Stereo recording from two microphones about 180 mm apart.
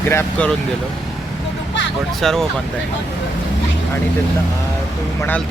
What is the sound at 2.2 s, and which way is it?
Speech, centre (ahead or behind).